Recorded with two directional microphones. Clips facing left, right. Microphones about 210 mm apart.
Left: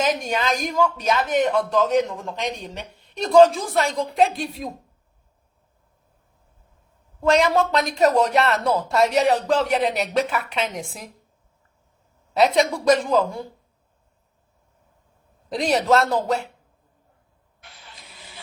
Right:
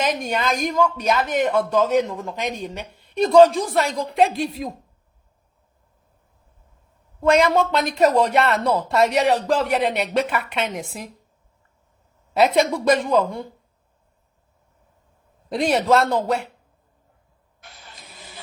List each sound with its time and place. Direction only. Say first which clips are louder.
0.0 s speech: even; centre (ahead or behind)
7.2 s speech: right 1 dB; centre (ahead or behind)
12.3 s speech: right 1 dB; centre (ahead or behind)
15.4 s speech: right 1 dB; centre (ahead or behind)
17.6 s vehicle: right 2 dB; 45° right (ahead or behind)